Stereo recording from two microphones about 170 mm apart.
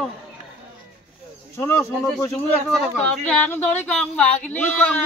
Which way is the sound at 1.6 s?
15° left (ahead or behind).